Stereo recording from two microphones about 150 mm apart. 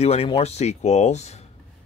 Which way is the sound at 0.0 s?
40° left (ahead or behind).